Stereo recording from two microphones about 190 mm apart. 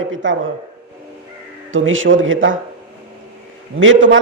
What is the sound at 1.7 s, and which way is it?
Speech, 90° right.